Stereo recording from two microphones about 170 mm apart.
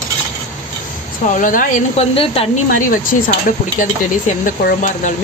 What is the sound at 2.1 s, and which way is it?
Speech, 35° left (ahead or behind).